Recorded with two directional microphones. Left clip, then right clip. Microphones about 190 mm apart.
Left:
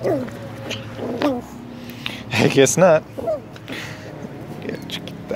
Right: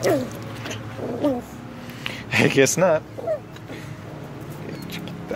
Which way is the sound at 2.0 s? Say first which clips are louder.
Left 1 dB; 5° left (ahead or behind).